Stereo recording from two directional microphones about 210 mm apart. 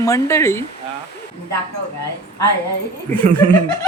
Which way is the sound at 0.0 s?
15° left (ahead or behind).